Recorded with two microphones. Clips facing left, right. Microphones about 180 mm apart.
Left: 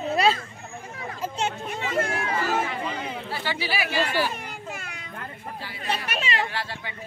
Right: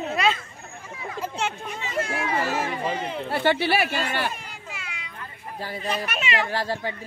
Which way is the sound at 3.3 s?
55° right (ahead or behind).